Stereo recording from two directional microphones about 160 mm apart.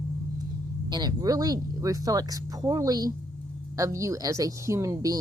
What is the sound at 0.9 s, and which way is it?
Speech, 25° right (ahead or behind).